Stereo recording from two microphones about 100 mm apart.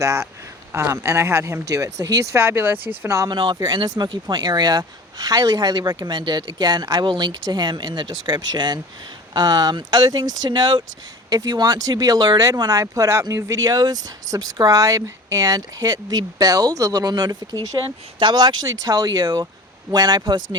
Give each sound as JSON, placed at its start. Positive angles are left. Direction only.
{"t": 0.0, "sound": "speech", "side_deg": -30}
{"t": 2.4, "sound": "speech", "side_deg": -25}
{"t": 3.2, "sound": "speech", "side_deg": -50}
{"t": 17.8, "sound": "speech", "side_deg": -50}